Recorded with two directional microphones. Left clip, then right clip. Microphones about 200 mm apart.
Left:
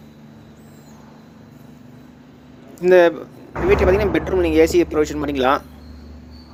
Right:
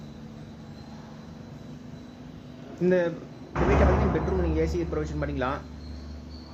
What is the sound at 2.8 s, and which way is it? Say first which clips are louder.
Speech: left 12 dB; 55° left (ahead or behind).